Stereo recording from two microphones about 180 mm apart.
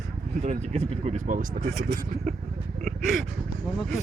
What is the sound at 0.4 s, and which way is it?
Speech, 40° right (ahead or behind).